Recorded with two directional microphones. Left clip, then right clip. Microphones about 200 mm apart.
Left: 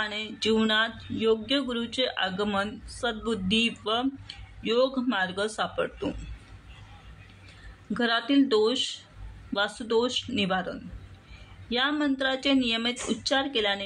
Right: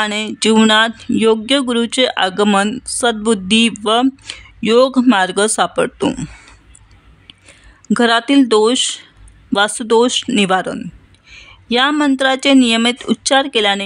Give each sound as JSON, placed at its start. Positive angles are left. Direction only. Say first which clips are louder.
{"t": 0.0, "sound": "speech", "louder": "right 13 dB", "side_deg": -60}
{"t": 7.9, "sound": "speech", "louder": "right 13 dB", "side_deg": -60}